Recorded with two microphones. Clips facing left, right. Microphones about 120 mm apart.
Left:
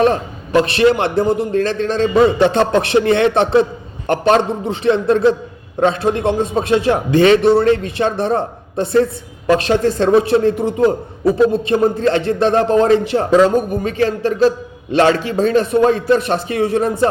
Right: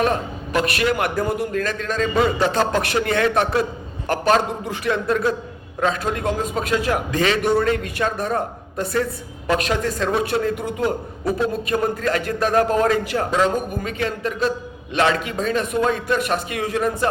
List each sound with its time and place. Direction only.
0.0 s a man's voice: 30° left (ahead or behind)